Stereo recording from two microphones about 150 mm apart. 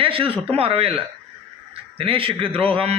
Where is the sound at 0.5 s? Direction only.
40° right (ahead or behind).